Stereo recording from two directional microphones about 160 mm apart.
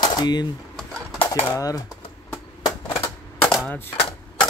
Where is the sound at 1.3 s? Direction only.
20° left (ahead or behind).